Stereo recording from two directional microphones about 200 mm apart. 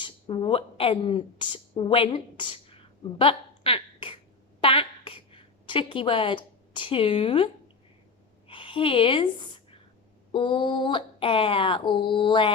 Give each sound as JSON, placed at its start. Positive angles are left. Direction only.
{"t": 0.0, "sound": "speech", "side_deg": 25}
{"t": 4.6, "sound": "a sound", "side_deg": 25}
{"t": 8.4, "sound": "a woman's voice", "side_deg": 25}